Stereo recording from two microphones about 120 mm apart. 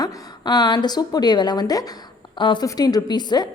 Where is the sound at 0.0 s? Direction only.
35° left (ahead or behind).